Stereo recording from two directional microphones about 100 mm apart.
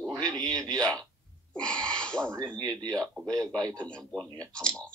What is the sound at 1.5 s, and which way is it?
Speech, 10° left (ahead or behind).